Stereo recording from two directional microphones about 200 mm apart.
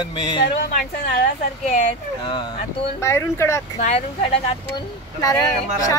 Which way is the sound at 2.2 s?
20° left (ahead or behind).